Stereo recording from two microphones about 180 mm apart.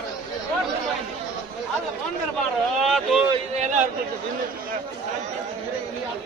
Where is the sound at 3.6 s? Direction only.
40° right (ahead or behind).